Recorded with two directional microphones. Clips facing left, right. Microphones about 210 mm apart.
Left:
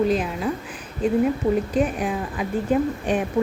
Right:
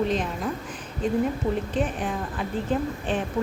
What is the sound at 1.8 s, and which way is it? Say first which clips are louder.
Speech: left 4 dB; 10° left (ahead or behind).